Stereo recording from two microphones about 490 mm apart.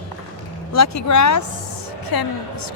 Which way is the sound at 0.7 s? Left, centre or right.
Left.